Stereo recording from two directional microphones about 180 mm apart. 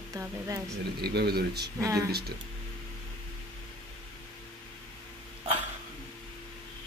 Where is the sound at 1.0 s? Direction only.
60° right (ahead or behind).